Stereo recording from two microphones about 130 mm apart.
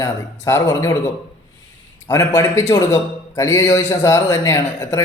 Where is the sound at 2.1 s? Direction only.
25° left (ahead or behind).